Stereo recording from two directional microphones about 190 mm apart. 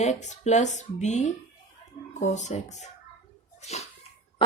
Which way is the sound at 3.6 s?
35° left (ahead or behind).